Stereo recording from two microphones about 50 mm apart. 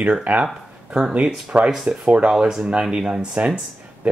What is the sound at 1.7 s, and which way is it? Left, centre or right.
Speech, centre.